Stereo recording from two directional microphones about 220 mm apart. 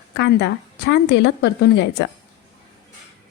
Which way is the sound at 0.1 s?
50° left (ahead or behind).